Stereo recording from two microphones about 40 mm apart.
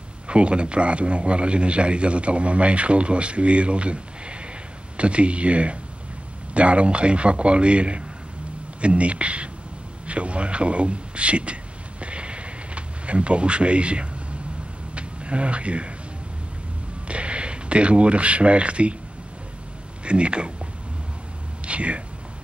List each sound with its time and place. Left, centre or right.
0.3 s a man's voice: right
12.0 s a sound: right
15.0 s speech: right
17.1 s speech: right
20.1 s a man's voice: right
21.6 s speech: right